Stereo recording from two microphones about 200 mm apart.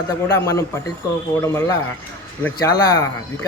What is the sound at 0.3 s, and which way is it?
A man's voice, 15° left (ahead or behind).